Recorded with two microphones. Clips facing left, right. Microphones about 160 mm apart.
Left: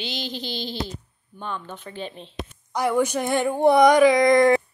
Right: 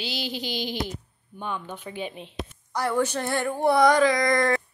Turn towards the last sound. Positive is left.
turn(degrees=15)  # may be behind; listen again after turning